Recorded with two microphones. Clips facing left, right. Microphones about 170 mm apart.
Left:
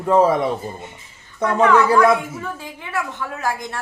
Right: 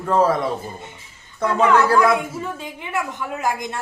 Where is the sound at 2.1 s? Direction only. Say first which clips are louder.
Right 1 dB; 20° right (ahead or behind).